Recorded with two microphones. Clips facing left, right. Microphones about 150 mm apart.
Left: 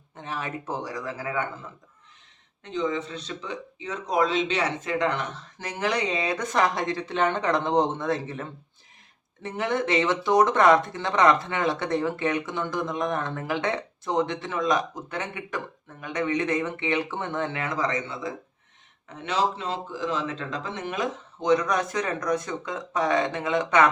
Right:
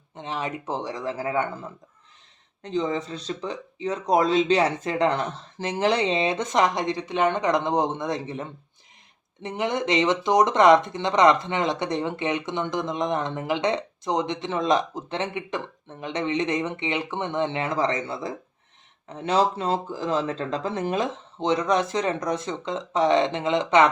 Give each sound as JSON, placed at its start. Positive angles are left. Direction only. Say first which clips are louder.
{"t": 0.2, "sound": "speech", "louder": "right 3 dB", "side_deg": -20}
{"t": 2.6, "sound": "speech", "louder": "right 2 dB", "side_deg": -35}